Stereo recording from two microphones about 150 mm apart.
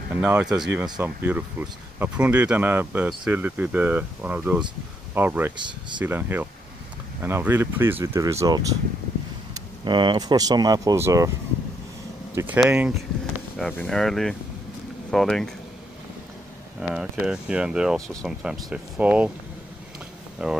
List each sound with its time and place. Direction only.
0.1 s speech: 10° right (ahead or behind)
9.8 s speech: 30° right (ahead or behind)
12.5 s speech: 5° right (ahead or behind)
13.6 s speech: 5° left (ahead or behind)
16.9 s speech: 5° right (ahead or behind)
20.4 s speech: 5° right (ahead or behind)